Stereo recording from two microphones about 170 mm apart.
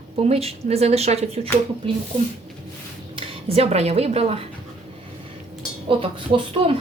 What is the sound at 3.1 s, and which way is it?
Speech, 35° right (ahead or behind).